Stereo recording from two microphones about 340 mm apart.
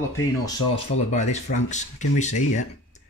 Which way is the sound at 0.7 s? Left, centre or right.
Centre.